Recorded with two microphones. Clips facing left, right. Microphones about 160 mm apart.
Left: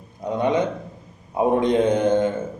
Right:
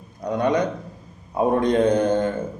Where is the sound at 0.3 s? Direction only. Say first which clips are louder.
Even; 20° left (ahead or behind).